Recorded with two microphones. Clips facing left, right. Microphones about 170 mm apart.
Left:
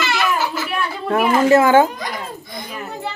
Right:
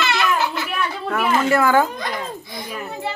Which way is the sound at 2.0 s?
Centre (ahead or behind).